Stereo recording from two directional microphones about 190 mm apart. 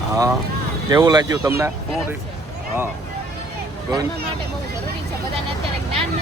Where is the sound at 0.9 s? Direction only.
20° right (ahead or behind).